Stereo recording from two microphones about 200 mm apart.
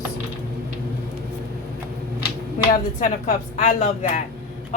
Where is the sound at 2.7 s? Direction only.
40° left (ahead or behind).